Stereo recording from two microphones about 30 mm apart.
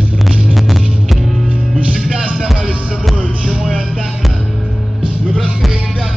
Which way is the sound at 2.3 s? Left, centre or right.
Centre.